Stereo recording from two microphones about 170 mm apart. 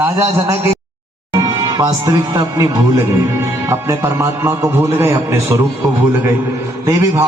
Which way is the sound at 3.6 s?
15° right (ahead or behind).